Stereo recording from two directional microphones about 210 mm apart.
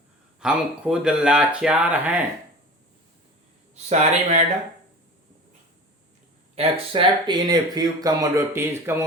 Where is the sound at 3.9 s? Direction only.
30° right (ahead or behind).